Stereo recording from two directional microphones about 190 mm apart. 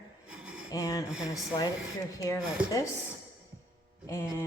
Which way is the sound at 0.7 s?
20° left (ahead or behind).